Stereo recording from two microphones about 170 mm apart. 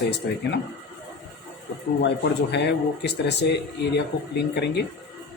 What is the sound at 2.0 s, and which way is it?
Speech, 90° left.